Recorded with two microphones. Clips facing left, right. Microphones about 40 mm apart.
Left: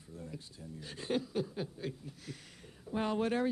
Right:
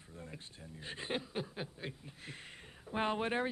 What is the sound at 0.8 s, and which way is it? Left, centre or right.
A man's voice, right.